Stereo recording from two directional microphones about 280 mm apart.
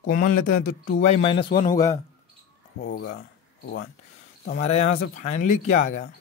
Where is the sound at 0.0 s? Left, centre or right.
Left; by 2.0 s centre.